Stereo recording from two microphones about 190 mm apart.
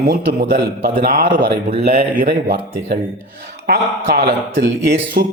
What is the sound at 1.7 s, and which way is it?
Speech, 40° right (ahead or behind).